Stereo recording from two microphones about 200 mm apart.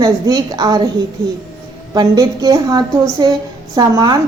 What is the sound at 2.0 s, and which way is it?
A woman's voice, 20° right (ahead or behind).